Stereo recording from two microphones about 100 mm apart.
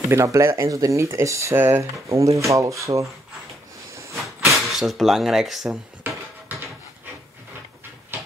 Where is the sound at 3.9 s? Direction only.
30° right (ahead or behind).